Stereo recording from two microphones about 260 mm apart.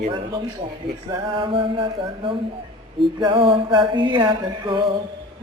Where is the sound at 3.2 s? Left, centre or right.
Centre.